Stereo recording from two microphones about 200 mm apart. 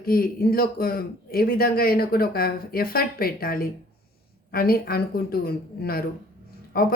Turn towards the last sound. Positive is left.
turn(degrees=50)  # may be behind; listen again after turning